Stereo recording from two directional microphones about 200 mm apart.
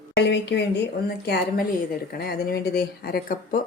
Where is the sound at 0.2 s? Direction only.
60° left (ahead or behind).